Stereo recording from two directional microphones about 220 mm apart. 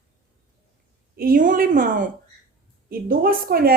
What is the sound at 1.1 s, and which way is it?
A woman's voice, 45° right (ahead or behind).